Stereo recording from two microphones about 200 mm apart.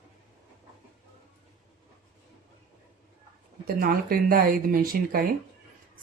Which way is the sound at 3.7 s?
45° right (ahead or behind).